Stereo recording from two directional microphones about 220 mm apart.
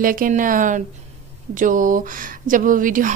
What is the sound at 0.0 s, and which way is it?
Speech, 40° right (ahead or behind).